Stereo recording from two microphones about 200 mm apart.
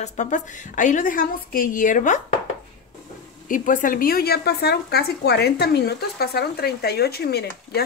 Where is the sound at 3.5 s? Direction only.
40° left (ahead or behind).